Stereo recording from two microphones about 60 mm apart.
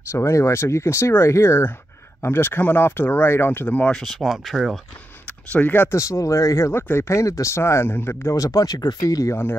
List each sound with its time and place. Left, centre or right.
0.1 s speech: left
3.6 s speech: left
3.9 s speech: centre
5.2 s a sound: left
5.9 s speech: left
6.7 s speech: left
7.5 s speech: left
8.4 s speech: left
9.3 s speech: left